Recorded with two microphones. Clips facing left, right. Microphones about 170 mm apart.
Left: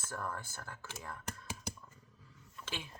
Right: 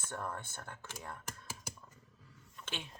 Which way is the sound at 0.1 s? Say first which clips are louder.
Even; 25° right (ahead or behind).